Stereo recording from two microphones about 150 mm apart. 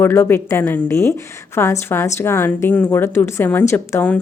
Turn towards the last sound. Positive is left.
turn(degrees=15)  # may be behind; listen again after turning